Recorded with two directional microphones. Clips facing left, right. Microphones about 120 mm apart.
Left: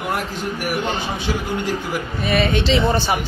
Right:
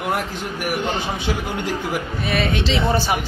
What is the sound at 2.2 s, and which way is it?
Speech, centre (ahead or behind).